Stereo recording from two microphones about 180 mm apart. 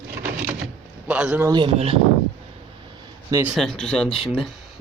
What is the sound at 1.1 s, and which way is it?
Speech, 10° right (ahead or behind).